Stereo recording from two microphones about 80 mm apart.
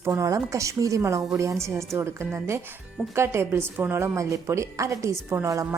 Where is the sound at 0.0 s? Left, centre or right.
Right.